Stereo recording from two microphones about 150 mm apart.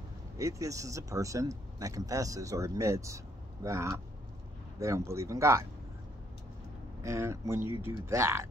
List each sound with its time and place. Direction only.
0.4 s speech: 20° right (ahead or behind)
7.0 s speech: 20° right (ahead or behind)